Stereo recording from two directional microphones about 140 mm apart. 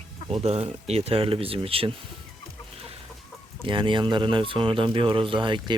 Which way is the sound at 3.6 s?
35° right (ahead or behind).